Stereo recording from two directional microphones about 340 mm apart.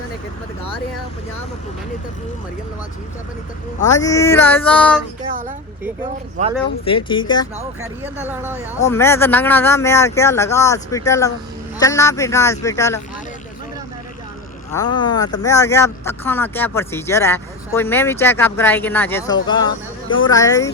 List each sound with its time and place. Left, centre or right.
3.8 s speech: centre
6.4 s speech: right
6.8 s speech: centre
8.2 s speech: centre
8.8 s speech: centre
14.7 s speech: centre